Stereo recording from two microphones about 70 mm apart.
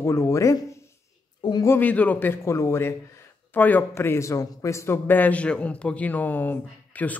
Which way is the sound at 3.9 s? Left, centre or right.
Left.